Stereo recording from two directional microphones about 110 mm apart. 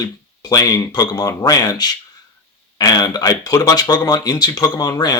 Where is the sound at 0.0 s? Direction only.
35° left (ahead or behind).